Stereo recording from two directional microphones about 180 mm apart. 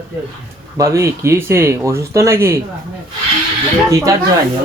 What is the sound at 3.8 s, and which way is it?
Speech, 20° right (ahead or behind).